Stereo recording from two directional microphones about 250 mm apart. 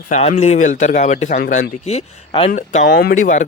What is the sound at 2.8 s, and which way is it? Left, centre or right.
Speech, left.